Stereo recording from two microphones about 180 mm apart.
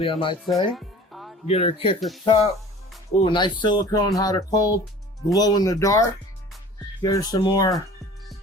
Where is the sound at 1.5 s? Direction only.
35° left (ahead or behind).